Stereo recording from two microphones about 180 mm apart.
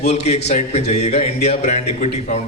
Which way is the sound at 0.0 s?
40° left (ahead or behind).